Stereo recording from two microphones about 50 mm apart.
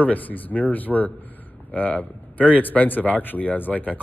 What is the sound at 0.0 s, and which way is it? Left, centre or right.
Speech, left.